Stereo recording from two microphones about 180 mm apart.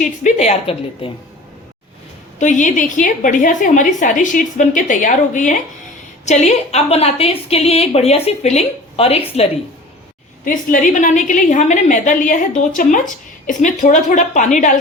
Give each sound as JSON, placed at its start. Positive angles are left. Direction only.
{"t": 0.0, "sound": "a woman's voice", "side_deg": 45}
{"t": 2.4, "sound": "a woman's voice", "side_deg": 45}
{"t": 10.4, "sound": "a woman's voice", "side_deg": 45}